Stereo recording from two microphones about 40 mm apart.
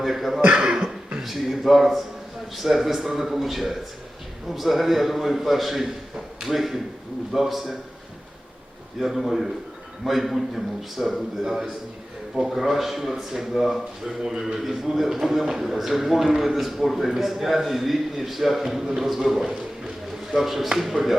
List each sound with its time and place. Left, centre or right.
0.0 s a man's voice: centre
0.4 s speech: right
1.2 s a man's voice: centre
9.0 s a man's voice: centre